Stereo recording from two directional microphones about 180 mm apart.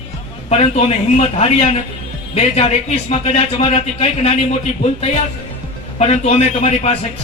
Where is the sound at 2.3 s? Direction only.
35° left (ahead or behind).